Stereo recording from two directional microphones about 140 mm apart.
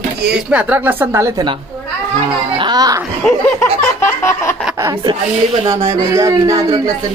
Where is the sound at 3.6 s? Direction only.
20° left (ahead or behind).